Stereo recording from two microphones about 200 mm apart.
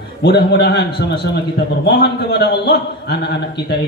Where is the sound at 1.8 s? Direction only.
55° left (ahead or behind).